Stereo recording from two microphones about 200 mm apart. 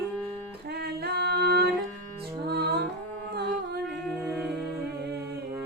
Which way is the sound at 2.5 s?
55° right (ahead or behind).